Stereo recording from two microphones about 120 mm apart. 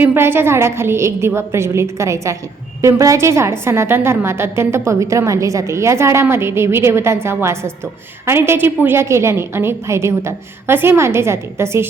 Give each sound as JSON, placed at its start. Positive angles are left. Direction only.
{"t": 0.0, "sound": "a woman's voice", "side_deg": -20}